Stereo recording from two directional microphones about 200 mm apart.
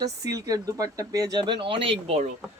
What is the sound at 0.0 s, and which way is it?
Speech, 15° right (ahead or behind).